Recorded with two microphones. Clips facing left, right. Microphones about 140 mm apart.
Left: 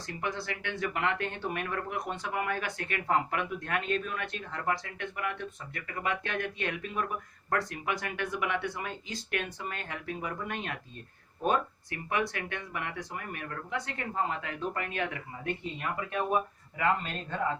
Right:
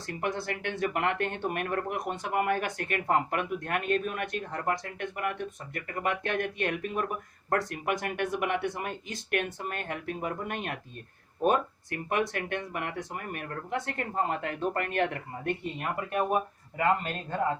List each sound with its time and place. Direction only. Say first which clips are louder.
0.0 s speech: right 3 dB; 50° right (ahead or behind)